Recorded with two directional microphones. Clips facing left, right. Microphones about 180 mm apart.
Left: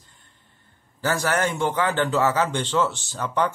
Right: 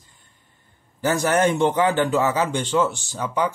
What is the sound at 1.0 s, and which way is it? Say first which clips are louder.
A man's voice: right 4 dB; 20° right (ahead or behind).